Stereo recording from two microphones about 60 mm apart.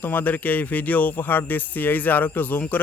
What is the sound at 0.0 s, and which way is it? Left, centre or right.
Speech, left.